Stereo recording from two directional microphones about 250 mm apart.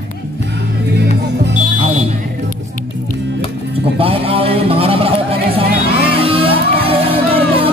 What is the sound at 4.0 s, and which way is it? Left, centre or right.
Speech, right.